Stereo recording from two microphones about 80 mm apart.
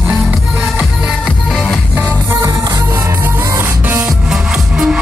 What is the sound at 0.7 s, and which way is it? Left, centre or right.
Music, centre.